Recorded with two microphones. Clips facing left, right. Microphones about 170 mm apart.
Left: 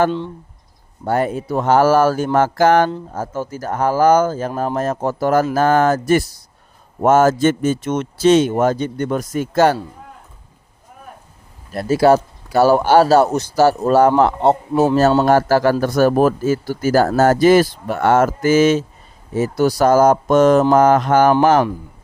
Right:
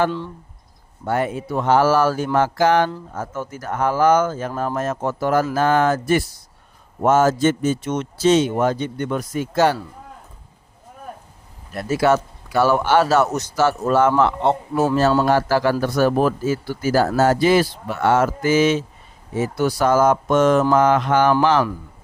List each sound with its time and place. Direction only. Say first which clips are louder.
1.0 s speech: left 3 dB; 40° left (ahead or behind)
3.1 s speech: left 4 dB; 35° left (ahead or behind); by 9.7 s 50° left (ahead or behind)
11.7 s speech: left 5 dB; 35° left (ahead or behind)
14.7 s speech: left 4 dB; 20° left (ahead or behind)
15.3 s speech: left 4 dB; 45° left (ahead or behind)